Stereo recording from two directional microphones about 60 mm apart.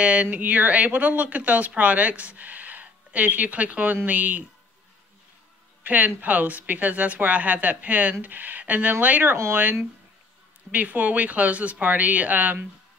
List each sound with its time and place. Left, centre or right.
0.0 s speech: right
5.9 s speech: right
9.3 s speech: right